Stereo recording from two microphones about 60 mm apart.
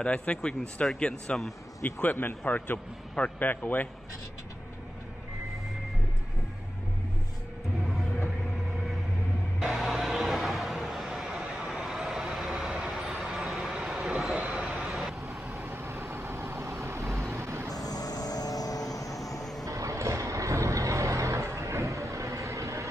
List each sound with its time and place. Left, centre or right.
0.0 s speech: centre
1.9 s a man's voice: left
9.6 s vehicle: centre
11.2 s vehicle: centre
14.9 s vehicle: centre
15.2 s vehicle: right
17.7 s vehicle: left
19.6 s vehicle: right